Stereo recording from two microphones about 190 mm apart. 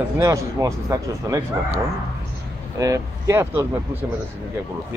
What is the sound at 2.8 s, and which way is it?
Speech, 15° right (ahead or behind).